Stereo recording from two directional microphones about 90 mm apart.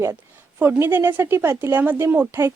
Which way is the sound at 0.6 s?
20° right (ahead or behind).